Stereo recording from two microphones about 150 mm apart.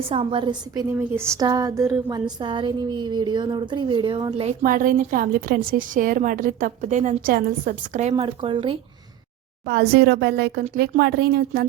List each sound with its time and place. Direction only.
0.1 s a woman's voice: 35° right (ahead or behind)
4.6 s a woman's voice: 65° right (ahead or behind)
7.3 s a woman's voice: 65° right (ahead or behind)
8.1 s speech: 35° right (ahead or behind)
9.6 s a woman's voice: 90° right